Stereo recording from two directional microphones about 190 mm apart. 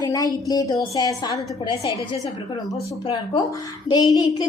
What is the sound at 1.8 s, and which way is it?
Speech, 15° right (ahead or behind).